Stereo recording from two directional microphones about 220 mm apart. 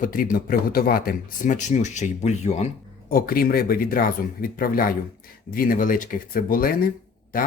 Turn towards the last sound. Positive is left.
turn(degrees=40)  # may be behind; listen again after turning